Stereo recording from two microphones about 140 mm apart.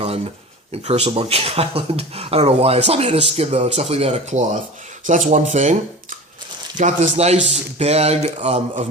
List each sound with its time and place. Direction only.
0.7 s speech: 45° right (ahead or behind)